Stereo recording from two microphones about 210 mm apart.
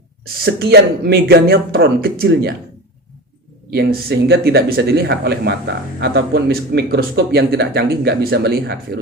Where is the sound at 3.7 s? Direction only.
50° right (ahead or behind).